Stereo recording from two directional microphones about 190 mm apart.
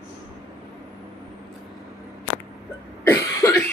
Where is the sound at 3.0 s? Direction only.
15° left (ahead or behind).